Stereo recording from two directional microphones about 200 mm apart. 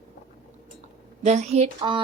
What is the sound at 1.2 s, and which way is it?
Speech, 35° right (ahead or behind).